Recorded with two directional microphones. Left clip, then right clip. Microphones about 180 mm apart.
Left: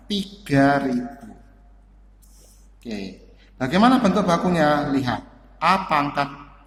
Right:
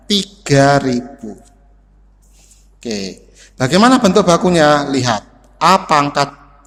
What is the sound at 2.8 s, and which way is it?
A man's voice, 50° right (ahead or behind).